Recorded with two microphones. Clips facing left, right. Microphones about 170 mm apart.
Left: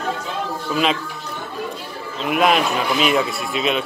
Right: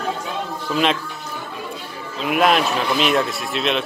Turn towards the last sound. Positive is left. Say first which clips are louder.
# left 1 dB
turn(degrees=5)  # may be behind; listen again after turning